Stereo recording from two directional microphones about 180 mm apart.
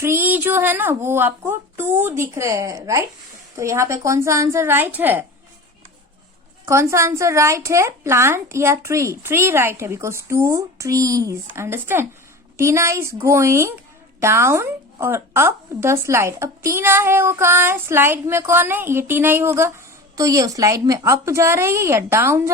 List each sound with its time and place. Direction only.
0.0 s a woman's voice: 10° right (ahead or behind)
6.7 s a woman's voice: 15° right (ahead or behind)